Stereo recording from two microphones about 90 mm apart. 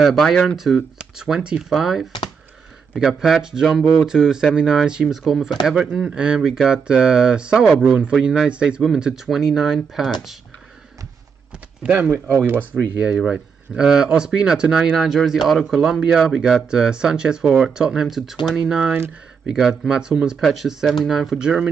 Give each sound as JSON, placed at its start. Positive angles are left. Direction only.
{"t": 0.0, "sound": "speech", "side_deg": 0}
{"t": 11.8, "sound": "speech", "side_deg": -15}
{"t": 12.1, "sound": "speech", "side_deg": -30}
{"t": 13.0, "sound": "speech", "side_deg": -10}